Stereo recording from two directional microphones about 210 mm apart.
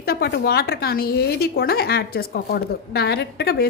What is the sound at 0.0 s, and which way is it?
A woman's voice, 45° left (ahead or behind).